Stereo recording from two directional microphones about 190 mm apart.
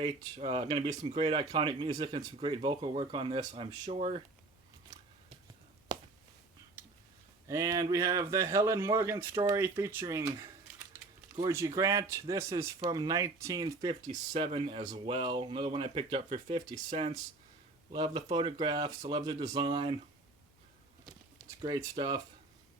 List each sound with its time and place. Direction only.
0.0 s speech: 30° right (ahead or behind)
4.9 s a sound: 20° right (ahead or behind)
7.4 s a man's voice: 15° right (ahead or behind)
16.9 s speech: 40° right (ahead or behind)
17.9 s speech: 20° right (ahead or behind)
21.6 s speech: 20° right (ahead or behind)